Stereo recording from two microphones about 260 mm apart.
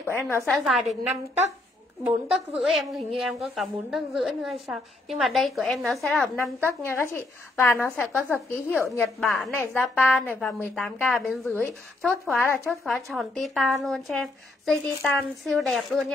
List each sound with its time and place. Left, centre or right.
0.0 s a woman's voice: centre
2.0 s a woman's voice: centre